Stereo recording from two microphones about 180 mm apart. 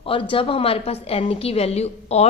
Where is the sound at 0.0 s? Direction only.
30° left (ahead or behind).